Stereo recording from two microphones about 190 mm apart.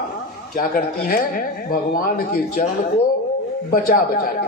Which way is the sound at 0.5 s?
50° left (ahead or behind).